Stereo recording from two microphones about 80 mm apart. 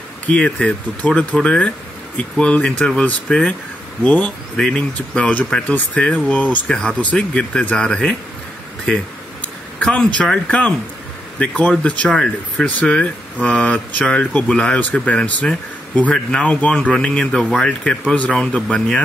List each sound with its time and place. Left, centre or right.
0.3 s speech: centre
9.8 s speech: centre